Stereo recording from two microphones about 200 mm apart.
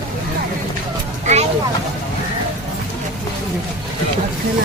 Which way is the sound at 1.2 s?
35° right (ahead or behind).